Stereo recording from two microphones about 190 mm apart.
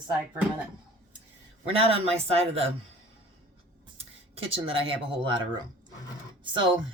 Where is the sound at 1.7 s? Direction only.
30° right (ahead or behind).